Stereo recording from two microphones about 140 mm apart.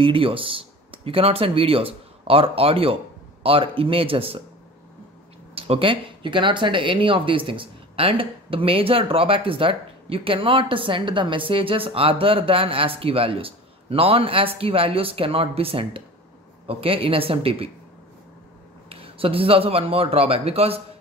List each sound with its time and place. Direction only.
0.0 s speech: 40° right (ahead or behind)
5.5 s speech: 45° right (ahead or behind)
18.9 s a man's voice: 40° right (ahead or behind)